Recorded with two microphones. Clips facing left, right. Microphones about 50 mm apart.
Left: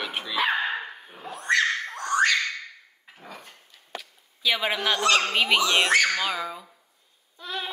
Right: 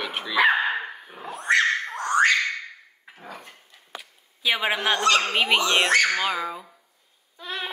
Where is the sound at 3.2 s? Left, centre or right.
Right.